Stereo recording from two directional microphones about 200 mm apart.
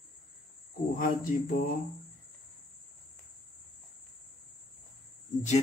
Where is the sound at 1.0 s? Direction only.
45° left (ahead or behind).